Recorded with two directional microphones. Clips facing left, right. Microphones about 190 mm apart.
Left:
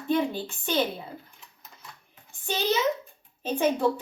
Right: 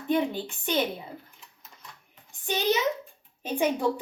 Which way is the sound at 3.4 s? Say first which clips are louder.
Left 2 dB; 15° right (ahead or behind).